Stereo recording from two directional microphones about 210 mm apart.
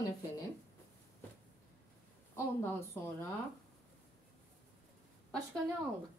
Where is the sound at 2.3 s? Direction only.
10° left (ahead or behind).